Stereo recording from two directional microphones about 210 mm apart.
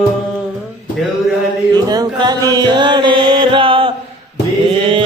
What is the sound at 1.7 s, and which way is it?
Chant, 20° right (ahead or behind).